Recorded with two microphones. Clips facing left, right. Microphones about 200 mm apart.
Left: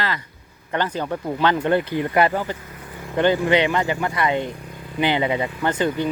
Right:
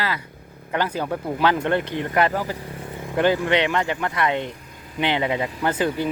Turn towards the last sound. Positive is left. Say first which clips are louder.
# left 1 dB
turn(degrees=-5)  # may be behind; listen again after turning